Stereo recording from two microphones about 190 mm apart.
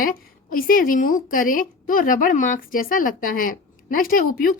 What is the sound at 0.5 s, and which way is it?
A woman's voice, 50° left (ahead or behind).